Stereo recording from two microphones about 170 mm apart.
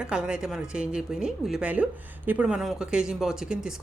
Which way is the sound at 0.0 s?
5° right (ahead or behind).